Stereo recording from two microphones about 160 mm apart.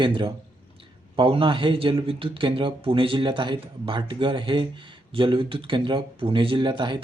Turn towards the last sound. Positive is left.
turn(degrees=-30)  # may be behind; listen again after turning